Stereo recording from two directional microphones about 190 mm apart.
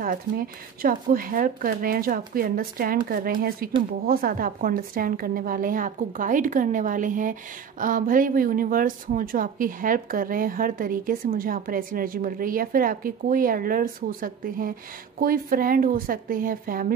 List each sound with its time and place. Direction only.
0.0 s a woman's voice: 50° right (ahead or behind)